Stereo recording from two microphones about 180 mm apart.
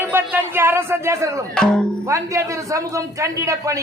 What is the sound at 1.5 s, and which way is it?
Speech, 5° left (ahead or behind).